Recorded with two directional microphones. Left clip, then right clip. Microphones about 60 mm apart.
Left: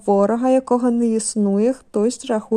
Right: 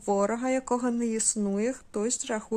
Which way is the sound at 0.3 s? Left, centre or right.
Left.